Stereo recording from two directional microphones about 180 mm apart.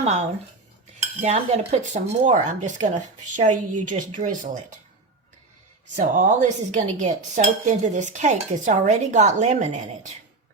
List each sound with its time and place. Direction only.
0.0 s speech: 40° right (ahead or behind)
1.2 s cutlery: 40° right (ahead or behind)
4.1 s speech: 45° right (ahead or behind)
6.0 s speech: 45° right (ahead or behind)
6.7 s cutlery: 40° right (ahead or behind)